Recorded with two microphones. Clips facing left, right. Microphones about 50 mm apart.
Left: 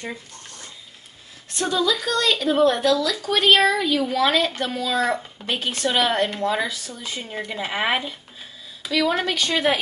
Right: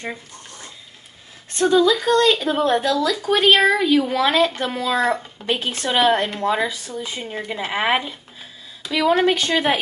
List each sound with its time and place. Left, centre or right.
1.5 s a woman's voice: right
7.2 s a woman's voice: centre
9.2 s speech: right